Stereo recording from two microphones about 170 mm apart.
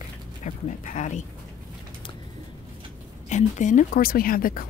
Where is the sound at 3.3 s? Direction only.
45° left (ahead or behind).